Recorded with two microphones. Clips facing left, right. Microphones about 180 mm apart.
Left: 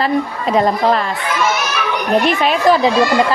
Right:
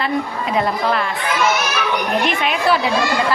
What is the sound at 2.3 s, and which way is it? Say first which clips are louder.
Speech: left 5 dB; 35° left (ahead or behind).